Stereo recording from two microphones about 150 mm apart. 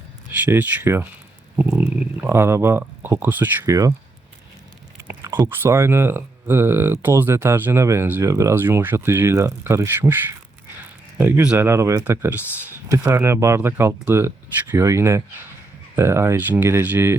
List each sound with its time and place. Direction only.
0.3 s speech: 10° right (ahead or behind)
2.2 s speech: 15° right (ahead or behind)
5.2 s a sound: 30° right (ahead or behind)
5.5 s speech: 20° right (ahead or behind)
11.2 s speech: 15° right (ahead or behind)